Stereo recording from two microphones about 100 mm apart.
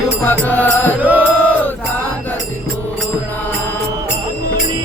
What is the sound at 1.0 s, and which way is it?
Mantra, 15° right (ahead or behind).